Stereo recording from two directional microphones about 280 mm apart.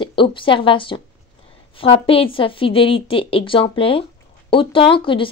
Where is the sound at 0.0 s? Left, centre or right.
Centre.